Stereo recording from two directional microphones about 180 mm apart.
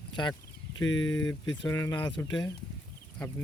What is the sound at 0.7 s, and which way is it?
Speech, 90° left.